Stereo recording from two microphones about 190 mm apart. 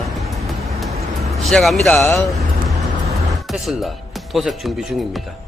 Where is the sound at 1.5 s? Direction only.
Centre (ahead or behind).